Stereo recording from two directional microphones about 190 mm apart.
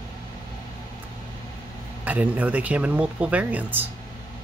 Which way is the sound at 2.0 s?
10° right (ahead or behind).